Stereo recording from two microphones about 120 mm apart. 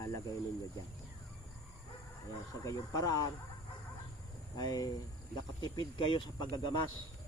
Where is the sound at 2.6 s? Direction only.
30° left (ahead or behind).